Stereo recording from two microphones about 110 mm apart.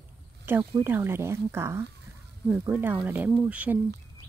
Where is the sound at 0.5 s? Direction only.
20° right (ahead or behind).